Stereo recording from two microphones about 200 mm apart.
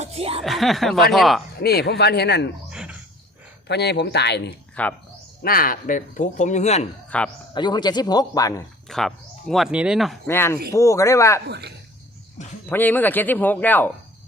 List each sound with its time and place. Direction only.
0.0 s speech: 30° right (ahead or behind)
0.4 s speech: centre (ahead or behind)
1.5 s speech: 55° left (ahead or behind)
2.6 s a sound: 5° right (ahead or behind)
3.7 s speech: 55° left (ahead or behind)
4.7 s speech: 5° left (ahead or behind)
5.4 s speech: 45° left (ahead or behind)
7.1 s speech: 5° left (ahead or behind)
7.5 s speech: 20° left (ahead or behind)
8.9 s speech: centre (ahead or behind)
10.2 s speech: 10° left (ahead or behind)
11.4 s speech: 55° right (ahead or behind)
12.6 s speech: 10° left (ahead or behind)